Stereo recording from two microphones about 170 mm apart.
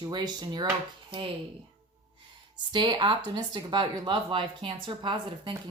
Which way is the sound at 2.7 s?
25° right (ahead or behind).